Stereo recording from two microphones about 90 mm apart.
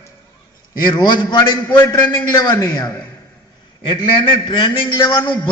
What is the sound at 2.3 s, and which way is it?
Speech, 50° left (ahead or behind).